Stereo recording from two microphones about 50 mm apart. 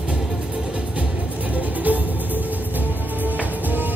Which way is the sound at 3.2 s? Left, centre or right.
Right.